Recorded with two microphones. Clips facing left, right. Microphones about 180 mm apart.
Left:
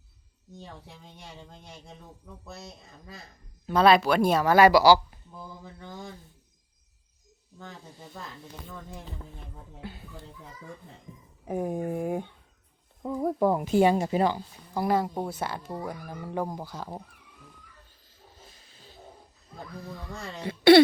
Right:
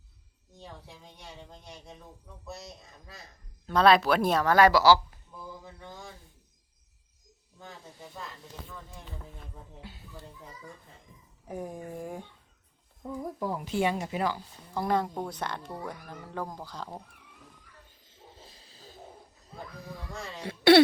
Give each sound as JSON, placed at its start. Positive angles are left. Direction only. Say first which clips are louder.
{"t": 3.7, "sound": "speech", "louder": "left 1 dB", "side_deg": 5}
{"t": 11.4, "sound": "speech", "louder": "left 8 dB", "side_deg": 60}
{"t": 14.7, "sound": "speech", "louder": "left 2 dB", "side_deg": 5}
{"t": 18.1, "sound": "a sound", "louder": "right 2 dB", "side_deg": -30}
{"t": 20.4, "sound": "speech", "louder": "left 3 dB", "side_deg": 0}